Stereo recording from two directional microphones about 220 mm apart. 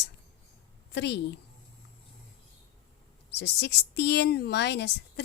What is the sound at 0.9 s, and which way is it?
Speech, 50° left (ahead or behind).